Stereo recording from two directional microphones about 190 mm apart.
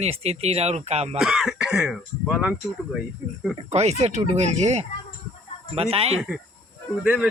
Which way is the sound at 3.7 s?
35° right (ahead or behind).